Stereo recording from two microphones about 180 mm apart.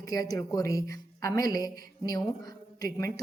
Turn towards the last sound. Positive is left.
turn(degrees=20)  # may be behind; listen again after turning